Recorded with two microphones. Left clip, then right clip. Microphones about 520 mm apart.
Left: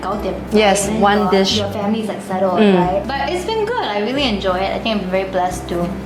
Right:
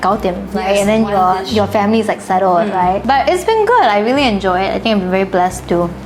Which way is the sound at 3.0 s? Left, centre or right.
Right.